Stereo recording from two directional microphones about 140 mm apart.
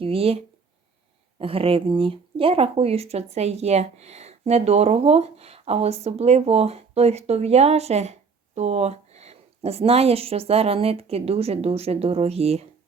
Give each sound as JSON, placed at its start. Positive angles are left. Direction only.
{"t": 0.0, "sound": "speech", "side_deg": -45}